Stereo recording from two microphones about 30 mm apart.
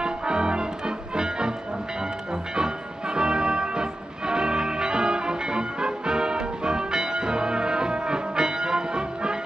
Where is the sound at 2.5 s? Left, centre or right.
Right.